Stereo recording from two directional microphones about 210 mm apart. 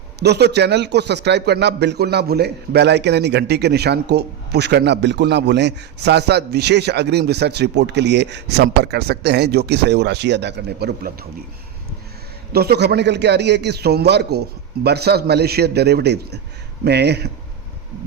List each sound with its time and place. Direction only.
0.2 s a man's voice: 50° right (ahead or behind)
12.5 s a man's voice: 50° right (ahead or behind)